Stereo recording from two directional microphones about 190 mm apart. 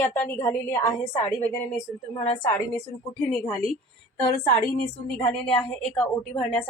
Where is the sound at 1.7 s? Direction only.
30° left (ahead or behind).